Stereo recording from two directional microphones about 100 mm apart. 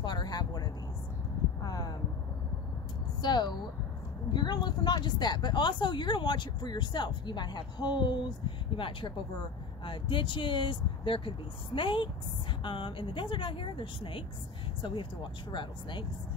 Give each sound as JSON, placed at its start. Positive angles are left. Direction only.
{"t": 0.0, "sound": "vehicle", "side_deg": 45}
{"t": 1.6, "sound": "a sound", "side_deg": 40}
{"t": 3.2, "sound": "speech", "side_deg": 45}
{"t": 15.5, "sound": "speech", "side_deg": 55}